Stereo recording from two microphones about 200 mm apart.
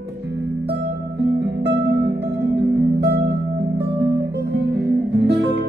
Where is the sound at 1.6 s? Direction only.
55° right (ahead or behind).